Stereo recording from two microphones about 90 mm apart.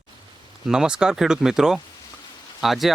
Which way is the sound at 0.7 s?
10° right (ahead or behind).